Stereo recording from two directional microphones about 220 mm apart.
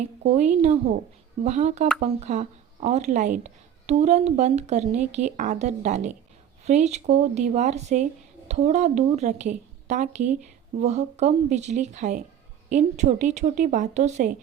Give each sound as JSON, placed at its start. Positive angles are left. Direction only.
{"t": 0.0, "sound": "speech", "side_deg": -30}